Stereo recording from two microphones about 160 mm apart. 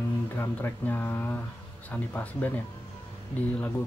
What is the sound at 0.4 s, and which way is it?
Speech, 10° left (ahead or behind).